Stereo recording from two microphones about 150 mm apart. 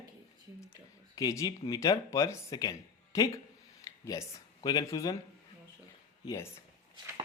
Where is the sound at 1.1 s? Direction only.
20° left (ahead or behind).